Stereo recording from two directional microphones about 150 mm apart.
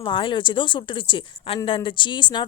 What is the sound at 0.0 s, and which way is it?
A woman's voice, 35° left (ahead or behind).